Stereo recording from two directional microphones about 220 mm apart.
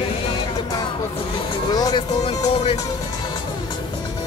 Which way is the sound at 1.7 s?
20° left (ahead or behind).